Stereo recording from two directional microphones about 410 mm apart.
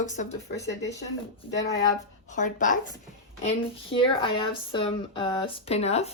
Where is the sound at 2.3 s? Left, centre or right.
Centre.